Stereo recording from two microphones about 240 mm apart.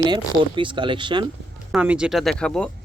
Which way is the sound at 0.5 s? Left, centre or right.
Right.